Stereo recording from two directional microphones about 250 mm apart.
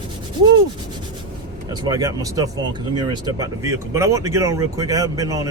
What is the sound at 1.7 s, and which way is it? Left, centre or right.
Speech, centre.